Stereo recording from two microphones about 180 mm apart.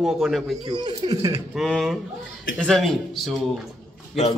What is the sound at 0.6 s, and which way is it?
Speech, 25° right (ahead or behind).